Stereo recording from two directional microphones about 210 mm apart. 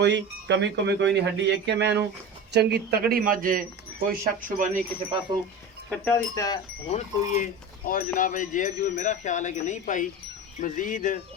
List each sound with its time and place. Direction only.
0.0 s speech: 55° right (ahead or behind); by 4.8 s 40° right (ahead or behind)
5.9 s speech: 15° left (ahead or behind)
6.8 s speech: 30° left (ahead or behind)